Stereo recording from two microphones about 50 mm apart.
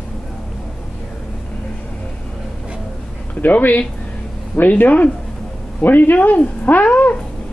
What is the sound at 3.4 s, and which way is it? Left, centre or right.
Speech, left.